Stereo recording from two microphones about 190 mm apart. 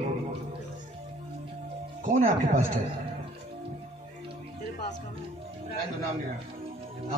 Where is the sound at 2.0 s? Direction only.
40° right (ahead or behind).